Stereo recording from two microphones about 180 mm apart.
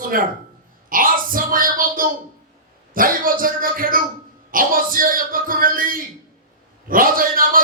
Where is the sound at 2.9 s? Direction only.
50° right (ahead or behind).